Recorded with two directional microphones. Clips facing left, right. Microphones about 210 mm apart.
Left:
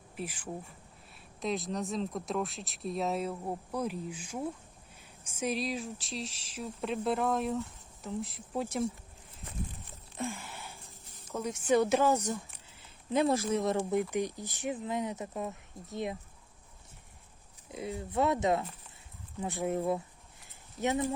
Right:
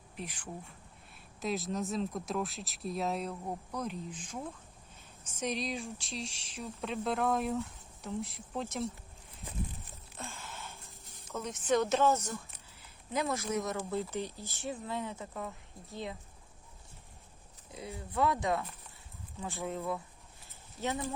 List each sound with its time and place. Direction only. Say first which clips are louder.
1.4 s speech: left 1 dB; centre (ahead or behind)
8.6 s speech: left 4 dB; 15° left (ahead or behind)
10.2 s a sound: left 8 dB; 15° left (ahead or behind)
11.3 s speech: left 3 dB; 10° left (ahead or behind)
12.8 s speech: left 6 dB; 30° left (ahead or behind)
13.9 s speech: left 5 dB; 15° left (ahead or behind)
17.7 s speech: left 6 dB; 20° left (ahead or behind)
19.6 s speech: left 6 dB; 25° left (ahead or behind)